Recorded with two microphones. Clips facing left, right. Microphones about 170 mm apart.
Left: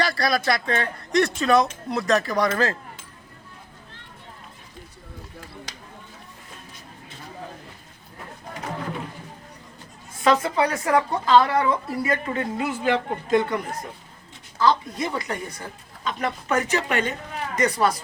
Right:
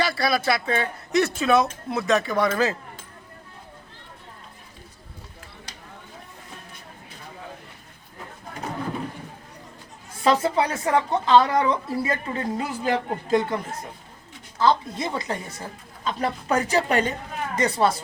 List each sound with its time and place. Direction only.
0.0 s speech: 5° right (ahead or behind)
5.7 s a sound: 90° left
10.2 s a woman's voice: 30° right (ahead or behind)
14.6 s a woman's voice: 25° right (ahead or behind)